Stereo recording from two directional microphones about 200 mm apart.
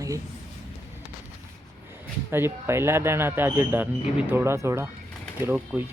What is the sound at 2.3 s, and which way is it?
Speech, 10° right (ahead or behind).